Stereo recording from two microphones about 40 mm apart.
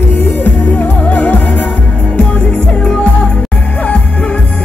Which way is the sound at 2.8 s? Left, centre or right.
Left.